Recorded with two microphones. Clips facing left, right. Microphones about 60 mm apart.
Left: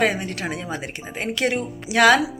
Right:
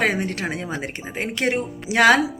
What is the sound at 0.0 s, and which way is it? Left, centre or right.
A woman's voice, right.